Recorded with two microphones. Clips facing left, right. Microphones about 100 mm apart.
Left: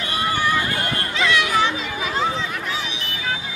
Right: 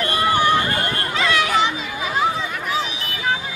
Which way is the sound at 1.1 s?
40° right (ahead or behind).